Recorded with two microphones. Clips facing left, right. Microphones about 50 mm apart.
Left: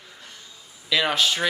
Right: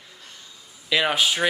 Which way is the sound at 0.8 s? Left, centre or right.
Centre.